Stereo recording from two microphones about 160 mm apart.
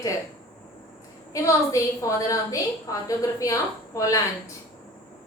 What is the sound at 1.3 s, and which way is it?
A woman's voice, 20° left (ahead or behind).